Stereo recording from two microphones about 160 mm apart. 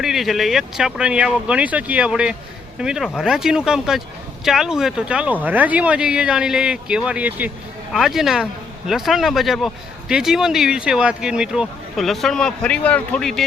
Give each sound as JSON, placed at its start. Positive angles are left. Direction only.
{"t": 0.0, "sound": "speech", "side_deg": 0}